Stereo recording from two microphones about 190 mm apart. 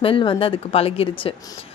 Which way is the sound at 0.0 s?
25° left (ahead or behind).